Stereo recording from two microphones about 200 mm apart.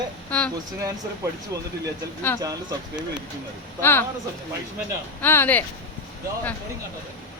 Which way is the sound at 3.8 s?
10° left (ahead or behind).